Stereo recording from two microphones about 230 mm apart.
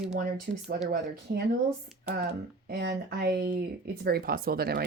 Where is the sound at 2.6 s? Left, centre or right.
Right.